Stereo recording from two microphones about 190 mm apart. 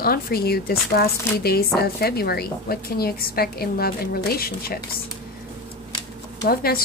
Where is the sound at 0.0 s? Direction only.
55° left (ahead or behind).